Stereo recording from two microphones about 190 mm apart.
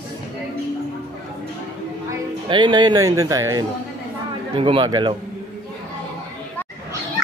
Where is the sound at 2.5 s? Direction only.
25° right (ahead or behind).